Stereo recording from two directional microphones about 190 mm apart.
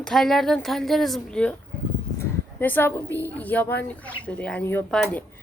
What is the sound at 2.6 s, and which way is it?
A woman's voice, 10° left (ahead or behind).